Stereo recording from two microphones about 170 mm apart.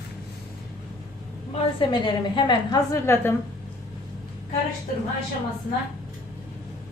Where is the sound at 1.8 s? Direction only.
25° left (ahead or behind).